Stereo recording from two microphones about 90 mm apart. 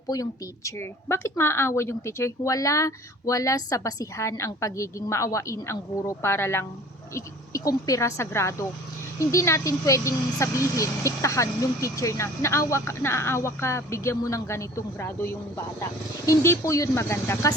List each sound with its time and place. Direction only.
0.1 s speech: 40° left (ahead or behind)
0.8 s speech: 30° left (ahead or behind)